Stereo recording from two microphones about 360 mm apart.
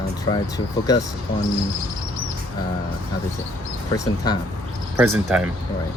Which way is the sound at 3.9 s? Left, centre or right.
Centre.